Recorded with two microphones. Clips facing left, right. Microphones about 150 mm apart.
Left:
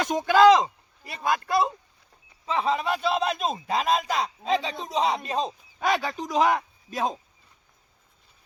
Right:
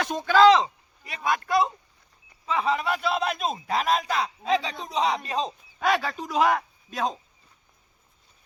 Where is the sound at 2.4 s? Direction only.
30° left (ahead or behind).